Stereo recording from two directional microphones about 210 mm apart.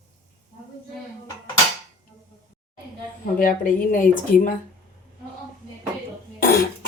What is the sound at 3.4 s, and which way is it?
A woman's voice, 40° left (ahead or behind).